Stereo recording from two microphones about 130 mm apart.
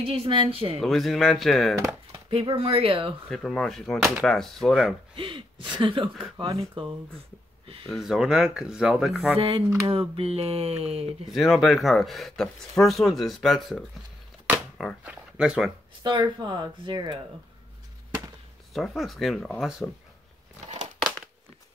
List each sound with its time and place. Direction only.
0.0 s speech: 45° right (ahead or behind)
0.7 s speech: centre (ahead or behind)
2.1 s speech: 45° right (ahead or behind)
3.3 s speech: centre (ahead or behind)
5.1 s speech: 40° right (ahead or behind)
7.8 s speech: centre (ahead or behind)
9.4 s speech: 45° right (ahead or behind)
11.2 s speech: centre (ahead or behind)
15.0 s speech: 5° right (ahead or behind)
16.0 s speech: 35° right (ahead or behind)
18.7 s speech: centre (ahead or behind)
20.6 s crumpling: 65° right (ahead or behind)